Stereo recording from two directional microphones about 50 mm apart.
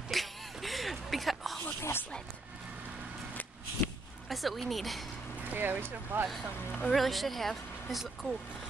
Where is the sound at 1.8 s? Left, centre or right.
Left.